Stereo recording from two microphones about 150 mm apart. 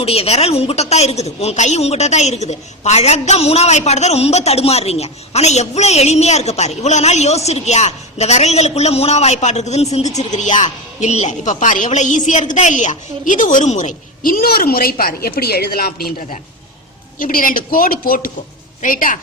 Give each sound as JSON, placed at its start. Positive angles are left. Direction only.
{"t": 0.0, "sound": "a woman's voice", "side_deg": 40}
{"t": 17.2, "sound": "a man's voice", "side_deg": 65}